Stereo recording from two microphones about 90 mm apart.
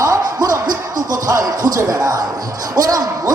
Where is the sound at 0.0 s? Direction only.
40° right (ahead or behind).